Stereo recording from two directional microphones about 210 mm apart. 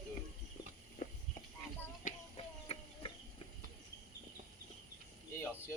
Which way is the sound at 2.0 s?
35° left (ahead or behind).